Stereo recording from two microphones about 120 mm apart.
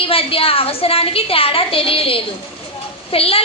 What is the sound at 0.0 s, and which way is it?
A woman's voice, 50° left (ahead or behind).